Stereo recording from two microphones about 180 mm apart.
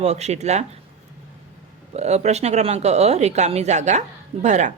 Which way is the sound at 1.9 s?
35° right (ahead or behind).